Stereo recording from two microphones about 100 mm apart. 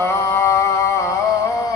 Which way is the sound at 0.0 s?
25° left (ahead or behind).